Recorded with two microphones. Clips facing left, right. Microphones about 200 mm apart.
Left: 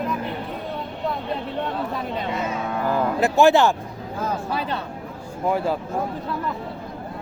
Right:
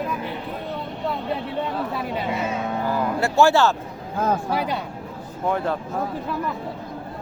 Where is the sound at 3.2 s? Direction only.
20° left (ahead or behind).